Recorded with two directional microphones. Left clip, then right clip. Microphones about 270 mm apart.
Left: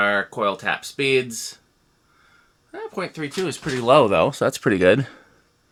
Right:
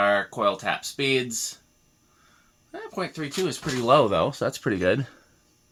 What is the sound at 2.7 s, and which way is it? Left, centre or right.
Speech, left.